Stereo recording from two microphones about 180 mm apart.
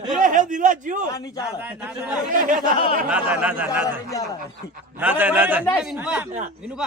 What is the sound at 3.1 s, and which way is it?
Speech, 5° right (ahead or behind).